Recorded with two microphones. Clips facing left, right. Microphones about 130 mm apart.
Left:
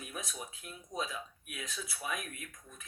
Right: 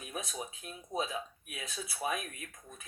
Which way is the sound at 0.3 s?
25° right (ahead or behind).